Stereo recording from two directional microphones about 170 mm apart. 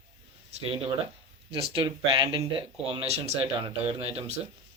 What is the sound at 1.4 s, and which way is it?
Speech, 30° right (ahead or behind).